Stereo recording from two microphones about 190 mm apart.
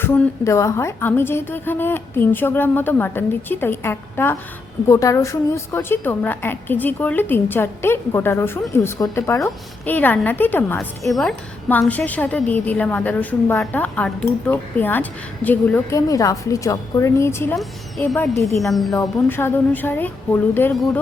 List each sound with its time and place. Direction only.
0.0 s a woman's voice: 15° left (ahead or behind)
18.9 s a woman's voice: 10° left (ahead or behind)